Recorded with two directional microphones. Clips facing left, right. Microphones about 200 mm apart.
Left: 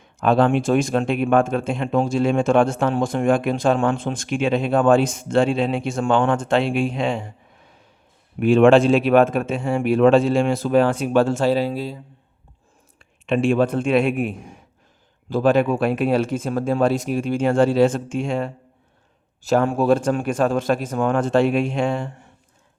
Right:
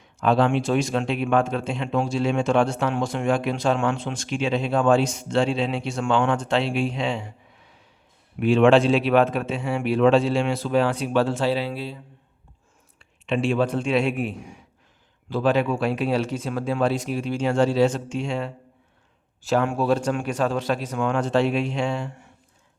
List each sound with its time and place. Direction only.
0.0 s a man's voice: 50° left (ahead or behind)
13.0 s a man's voice: 50° left (ahead or behind)